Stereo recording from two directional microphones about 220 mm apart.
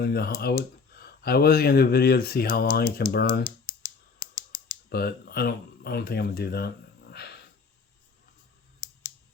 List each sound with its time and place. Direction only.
0.0 s speech: 45° left (ahead or behind)
4.2 s scissors: 25° left (ahead or behind)
4.9 s speech: 45° left (ahead or behind)